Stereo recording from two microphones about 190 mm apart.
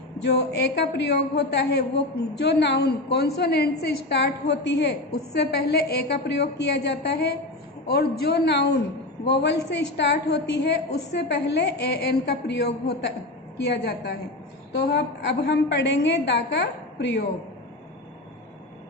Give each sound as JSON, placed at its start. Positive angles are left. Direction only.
{"t": 0.2, "sound": "a woman's voice", "side_deg": 60}